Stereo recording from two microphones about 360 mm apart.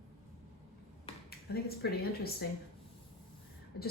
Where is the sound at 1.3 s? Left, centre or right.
Left.